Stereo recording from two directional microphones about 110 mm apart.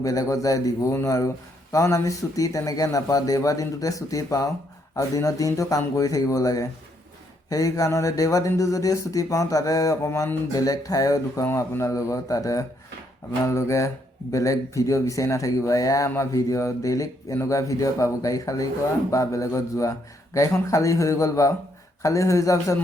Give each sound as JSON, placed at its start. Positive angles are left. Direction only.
{"t": 0.0, "sound": "speech", "side_deg": 30}